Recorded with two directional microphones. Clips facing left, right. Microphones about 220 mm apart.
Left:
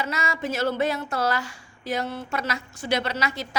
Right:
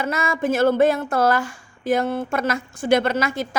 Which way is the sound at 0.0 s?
50° right (ahead or behind).